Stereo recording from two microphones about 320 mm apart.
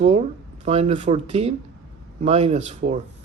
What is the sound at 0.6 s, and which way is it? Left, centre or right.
Speech, centre.